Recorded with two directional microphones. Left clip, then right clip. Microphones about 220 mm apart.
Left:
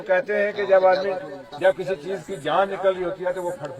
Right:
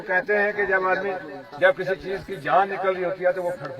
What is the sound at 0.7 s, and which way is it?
Speech, 40° right (ahead or behind).